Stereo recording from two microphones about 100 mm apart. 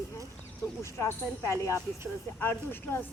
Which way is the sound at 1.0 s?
30° left (ahead or behind).